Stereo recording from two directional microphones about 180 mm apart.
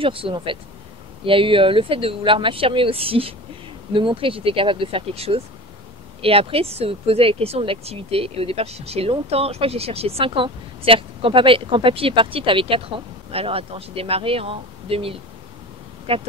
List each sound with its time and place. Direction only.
0.0 s speech: 30° right (ahead or behind)